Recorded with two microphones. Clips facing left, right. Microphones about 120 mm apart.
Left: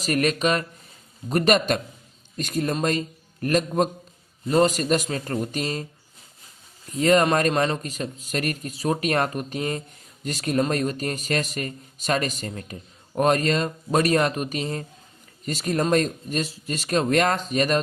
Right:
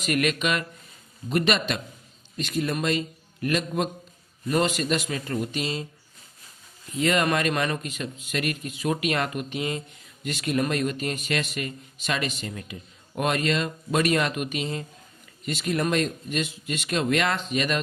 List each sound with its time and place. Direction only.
0.0 s a man's voice: 35° left (ahead or behind)
6.9 s a man's voice: 40° left (ahead or behind)